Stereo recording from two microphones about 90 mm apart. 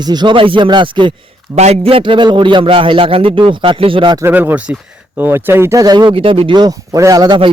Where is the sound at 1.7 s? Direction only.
90° right; by 4.2 s 70° right (ahead or behind).